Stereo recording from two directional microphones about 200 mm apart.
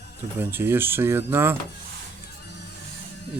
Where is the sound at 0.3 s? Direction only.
10° right (ahead or behind).